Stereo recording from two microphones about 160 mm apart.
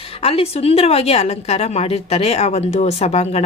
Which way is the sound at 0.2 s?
40° left (ahead or behind).